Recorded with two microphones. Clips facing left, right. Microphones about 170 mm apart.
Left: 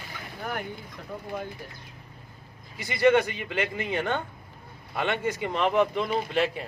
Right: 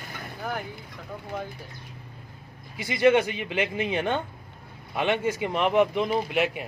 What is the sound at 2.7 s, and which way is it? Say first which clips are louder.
Speech: right 1 dB; 15° right (ahead or behind).